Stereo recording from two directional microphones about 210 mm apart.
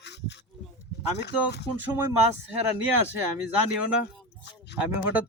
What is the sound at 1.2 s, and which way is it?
Speech, 55° left (ahead or behind).